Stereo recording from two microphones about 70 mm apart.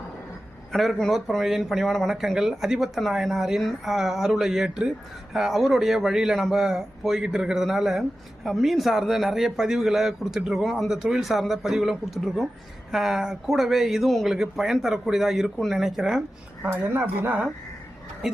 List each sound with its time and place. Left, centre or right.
0.7 s speech: centre
16.7 s a woman's voice: right